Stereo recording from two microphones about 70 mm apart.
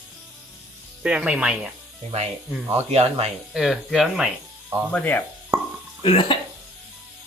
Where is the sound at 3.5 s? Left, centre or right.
Centre.